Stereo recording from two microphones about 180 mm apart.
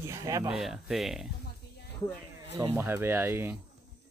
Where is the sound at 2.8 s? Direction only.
10° right (ahead or behind).